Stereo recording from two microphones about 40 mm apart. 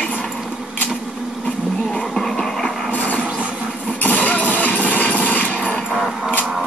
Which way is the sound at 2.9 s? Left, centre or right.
Left.